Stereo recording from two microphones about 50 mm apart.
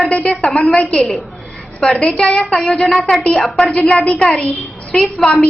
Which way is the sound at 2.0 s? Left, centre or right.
Centre.